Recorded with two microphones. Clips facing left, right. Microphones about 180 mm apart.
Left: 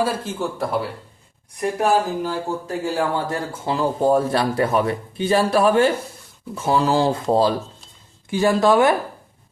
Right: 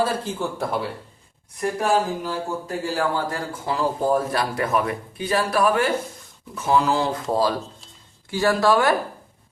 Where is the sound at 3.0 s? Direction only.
25° left (ahead or behind).